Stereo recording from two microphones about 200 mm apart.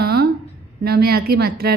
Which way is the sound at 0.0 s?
50° right (ahead or behind).